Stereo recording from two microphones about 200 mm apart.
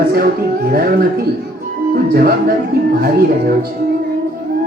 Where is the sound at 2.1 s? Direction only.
50° right (ahead or behind).